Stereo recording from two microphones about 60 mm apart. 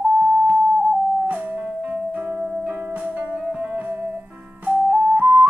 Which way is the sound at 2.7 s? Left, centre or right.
Right.